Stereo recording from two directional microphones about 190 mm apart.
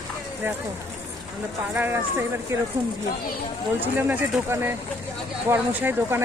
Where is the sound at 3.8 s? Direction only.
10° right (ahead or behind).